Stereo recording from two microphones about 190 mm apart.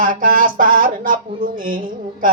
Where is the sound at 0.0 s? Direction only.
45° right (ahead or behind).